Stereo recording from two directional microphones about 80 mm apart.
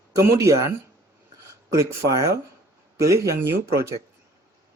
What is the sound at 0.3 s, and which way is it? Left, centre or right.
Speech, right.